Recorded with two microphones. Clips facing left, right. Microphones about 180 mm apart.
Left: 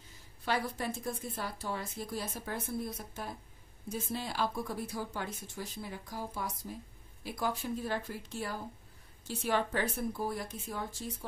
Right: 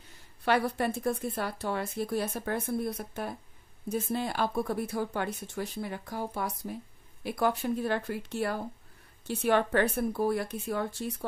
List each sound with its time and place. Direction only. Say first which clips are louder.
0.5 s a woman's voice: right 7 dB; 65° right (ahead or behind)